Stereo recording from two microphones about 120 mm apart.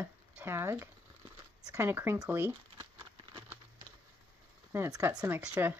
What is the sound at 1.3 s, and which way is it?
Zipper, 20° right (ahead or behind).